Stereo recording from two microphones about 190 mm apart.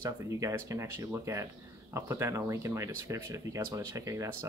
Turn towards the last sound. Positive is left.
turn(degrees=-15)  # may be behind; listen again after turning